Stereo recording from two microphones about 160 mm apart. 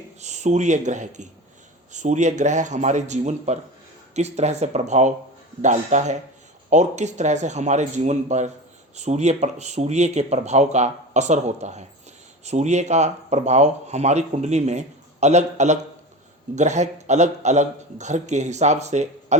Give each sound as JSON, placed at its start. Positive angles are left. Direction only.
{"t": 0.2, "sound": "speech", "side_deg": -45}